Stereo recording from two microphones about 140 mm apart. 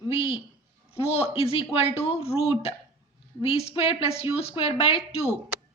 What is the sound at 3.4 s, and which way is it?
A woman's voice, 45° left (ahead or behind).